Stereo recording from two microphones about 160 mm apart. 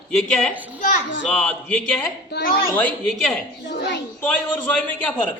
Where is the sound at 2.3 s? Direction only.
75° left (ahead or behind).